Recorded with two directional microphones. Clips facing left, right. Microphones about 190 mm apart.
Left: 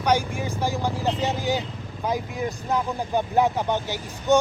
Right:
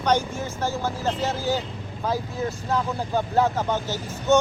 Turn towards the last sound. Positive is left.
turn(degrees=15)  # may be behind; listen again after turning